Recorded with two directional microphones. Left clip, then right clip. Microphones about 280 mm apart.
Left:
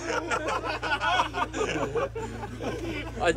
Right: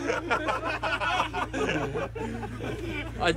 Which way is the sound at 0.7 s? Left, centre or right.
Centre.